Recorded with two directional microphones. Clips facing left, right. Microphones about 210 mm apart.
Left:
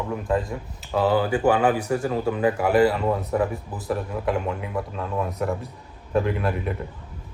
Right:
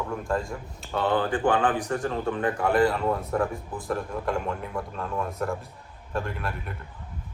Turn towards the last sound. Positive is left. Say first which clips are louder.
# left 8 dB
turn(degrees=0)  # may be behind; listen again after turning